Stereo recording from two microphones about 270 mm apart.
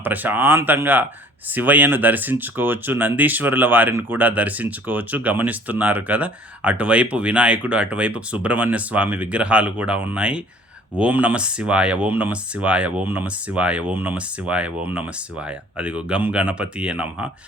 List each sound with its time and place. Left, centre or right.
0.0 s speech: centre